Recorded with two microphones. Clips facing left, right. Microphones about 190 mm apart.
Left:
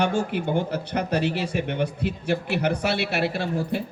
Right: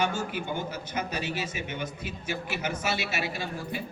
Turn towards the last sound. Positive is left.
turn(degrees=70)  # may be behind; listen again after turning